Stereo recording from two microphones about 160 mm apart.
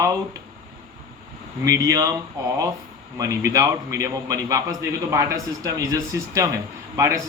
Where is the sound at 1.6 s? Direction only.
20° right (ahead or behind).